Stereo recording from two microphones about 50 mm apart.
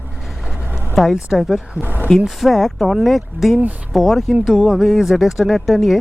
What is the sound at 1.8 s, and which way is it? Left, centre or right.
Speech, right.